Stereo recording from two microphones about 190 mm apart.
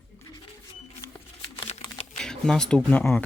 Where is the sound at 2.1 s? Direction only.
5° left (ahead or behind).